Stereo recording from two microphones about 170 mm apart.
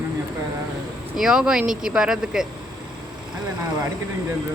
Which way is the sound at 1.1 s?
5° right (ahead or behind).